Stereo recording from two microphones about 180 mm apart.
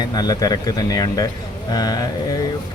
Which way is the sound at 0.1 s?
20° left (ahead or behind).